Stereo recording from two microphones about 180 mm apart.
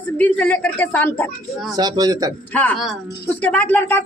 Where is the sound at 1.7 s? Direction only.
20° right (ahead or behind).